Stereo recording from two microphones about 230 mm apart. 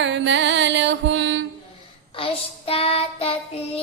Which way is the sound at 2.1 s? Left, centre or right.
Left.